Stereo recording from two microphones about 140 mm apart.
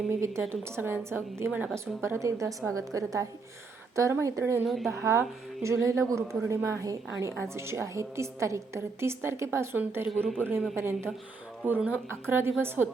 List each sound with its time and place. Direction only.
0.1 s a woman's voice: 20° right (ahead or behind)
4.6 s speech: centre (ahead or behind)
5.6 s a woman's voice: 20° right (ahead or behind)
10.2 s speech: 10° left (ahead or behind)
10.8 s a woman's voice: 20° right (ahead or behind)